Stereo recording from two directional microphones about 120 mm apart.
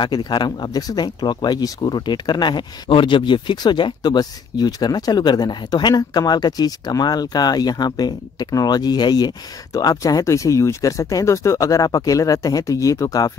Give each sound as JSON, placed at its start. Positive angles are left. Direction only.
{"t": 0.0, "sound": "speech", "side_deg": 40}